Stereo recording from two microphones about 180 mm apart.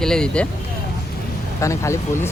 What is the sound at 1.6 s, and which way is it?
Speech, 15° left (ahead or behind).